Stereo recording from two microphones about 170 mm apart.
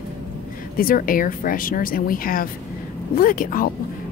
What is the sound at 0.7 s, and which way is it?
Speech, 55° left (ahead or behind).